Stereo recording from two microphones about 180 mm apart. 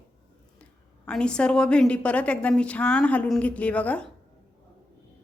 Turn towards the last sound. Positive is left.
turn(degrees=5)  # may be behind; listen again after turning